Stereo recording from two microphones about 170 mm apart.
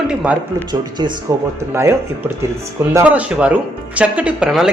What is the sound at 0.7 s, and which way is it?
Speech, 25° right (ahead or behind).